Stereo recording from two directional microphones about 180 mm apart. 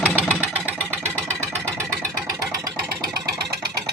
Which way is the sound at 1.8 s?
15° right (ahead or behind).